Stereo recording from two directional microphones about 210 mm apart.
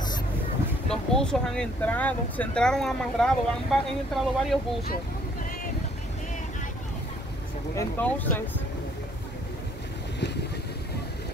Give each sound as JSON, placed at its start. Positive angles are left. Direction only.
{"t": 0.8, "sound": "speech", "side_deg": 5}
{"t": 7.7, "sound": "speech", "side_deg": 10}